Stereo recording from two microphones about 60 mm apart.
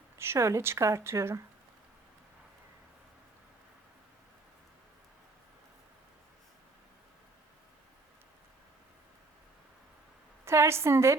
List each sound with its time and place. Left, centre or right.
0.2 s a woman's voice: right
10.4 s a woman's voice: right